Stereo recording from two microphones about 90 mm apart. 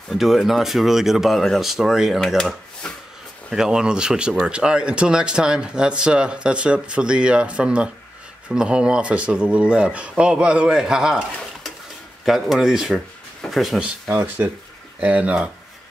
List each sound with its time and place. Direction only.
0.1 s speech: centre (ahead or behind)
14.0 s speech: 25° right (ahead or behind)